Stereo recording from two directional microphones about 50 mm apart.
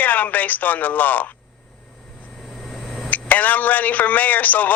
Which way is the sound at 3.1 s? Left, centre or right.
Left.